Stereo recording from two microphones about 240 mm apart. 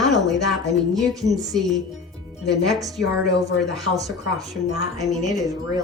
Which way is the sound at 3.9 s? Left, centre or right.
Centre.